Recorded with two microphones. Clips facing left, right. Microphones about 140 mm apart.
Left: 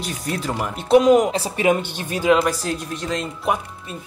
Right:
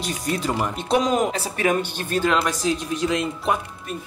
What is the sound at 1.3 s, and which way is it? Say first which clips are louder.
Speech: left 4 dB; 20° left (ahead or behind).